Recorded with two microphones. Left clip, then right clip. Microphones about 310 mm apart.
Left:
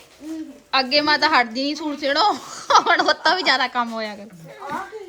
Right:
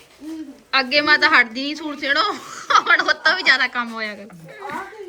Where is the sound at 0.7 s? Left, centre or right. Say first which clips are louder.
Right 2 dB; centre.